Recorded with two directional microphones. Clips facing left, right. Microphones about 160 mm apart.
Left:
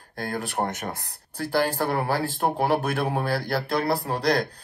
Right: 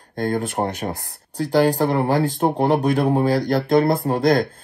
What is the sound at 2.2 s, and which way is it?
Speech, 40° right (ahead or behind).